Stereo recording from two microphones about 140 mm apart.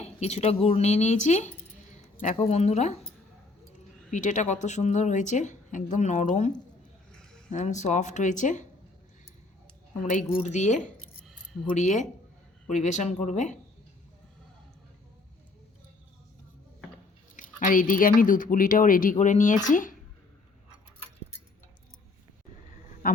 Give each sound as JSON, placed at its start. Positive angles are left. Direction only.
{"t": 0.0, "sound": "speech", "side_deg": 50}
{"t": 1.8, "sound": "keys jangling", "side_deg": 55}
{"t": 2.3, "sound": "speech", "side_deg": 50}
{"t": 4.1, "sound": "a woman's voice", "side_deg": 60}
{"t": 7.1, "sound": "a sound", "side_deg": 5}
{"t": 7.5, "sound": "a woman's voice", "side_deg": 60}
{"t": 10.0, "sound": "a woman's voice", "side_deg": 60}
{"t": 17.3, "sound": "speech", "side_deg": 70}
{"t": 23.0, "sound": "music", "side_deg": 80}